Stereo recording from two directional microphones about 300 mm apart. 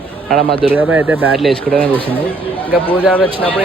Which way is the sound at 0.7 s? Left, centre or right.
Centre.